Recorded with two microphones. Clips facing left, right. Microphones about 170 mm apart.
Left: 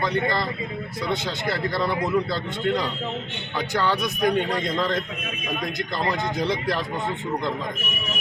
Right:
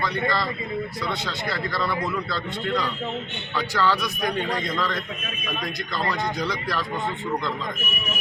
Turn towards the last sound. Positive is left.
turn(degrees=25)  # may be behind; listen again after turning